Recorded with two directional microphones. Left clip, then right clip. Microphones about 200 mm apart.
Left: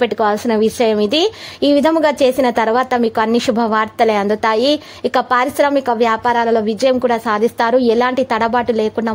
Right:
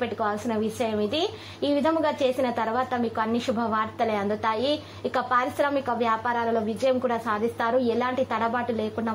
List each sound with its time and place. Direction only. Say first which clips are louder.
0.0 s a woman's voice: left 12 dB; 50° left (ahead or behind)